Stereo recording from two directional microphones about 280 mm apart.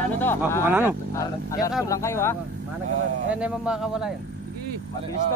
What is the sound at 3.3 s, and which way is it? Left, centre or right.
Speech, centre.